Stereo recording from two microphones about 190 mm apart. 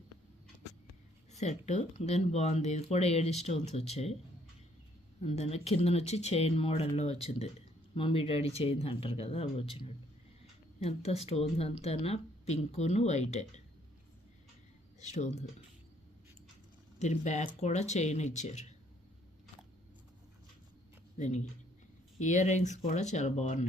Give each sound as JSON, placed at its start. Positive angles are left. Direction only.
{"t": 1.3, "sound": "speech", "side_deg": 35}
{"t": 5.2, "sound": "speech", "side_deg": 35}
{"t": 15.1, "sound": "speech", "side_deg": 40}
{"t": 17.0, "sound": "speech", "side_deg": 35}
{"t": 21.2, "sound": "speech", "side_deg": 35}